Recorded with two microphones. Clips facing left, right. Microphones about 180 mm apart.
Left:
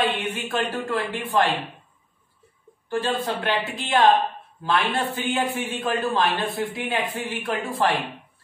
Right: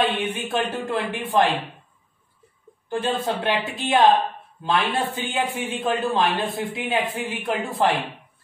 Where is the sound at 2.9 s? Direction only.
20° right (ahead or behind).